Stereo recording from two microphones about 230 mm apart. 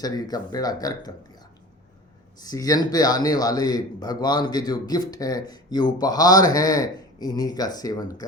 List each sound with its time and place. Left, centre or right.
0.0 s a man's voice: centre
2.4 s a man's voice: centre